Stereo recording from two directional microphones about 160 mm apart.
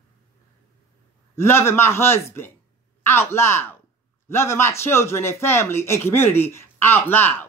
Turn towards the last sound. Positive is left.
turn(degrees=15)  # may be behind; listen again after turning